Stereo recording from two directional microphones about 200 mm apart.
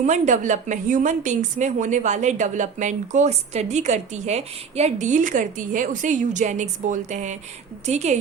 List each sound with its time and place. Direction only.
0.0 s a woman's voice: 40° right (ahead or behind)